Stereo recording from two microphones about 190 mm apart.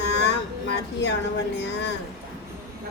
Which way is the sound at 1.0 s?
65° left (ahead or behind).